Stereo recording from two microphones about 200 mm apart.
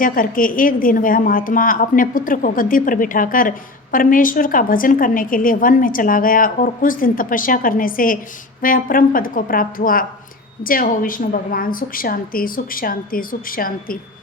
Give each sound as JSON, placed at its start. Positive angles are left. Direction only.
{"t": 0.0, "sound": "a woman's voice", "side_deg": 45}